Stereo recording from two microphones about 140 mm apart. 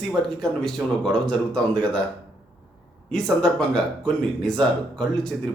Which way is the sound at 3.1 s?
5° left (ahead or behind).